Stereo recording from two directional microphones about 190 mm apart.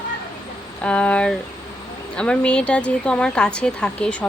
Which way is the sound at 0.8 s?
5° left (ahead or behind).